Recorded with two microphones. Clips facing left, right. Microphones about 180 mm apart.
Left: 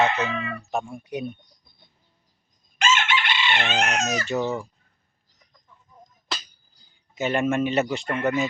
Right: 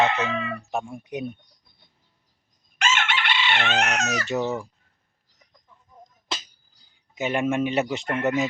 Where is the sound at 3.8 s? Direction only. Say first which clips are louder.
Left 1 dB; 30° left (ahead or behind).